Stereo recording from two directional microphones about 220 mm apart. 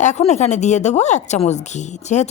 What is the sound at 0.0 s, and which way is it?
Speech, 30° left (ahead or behind).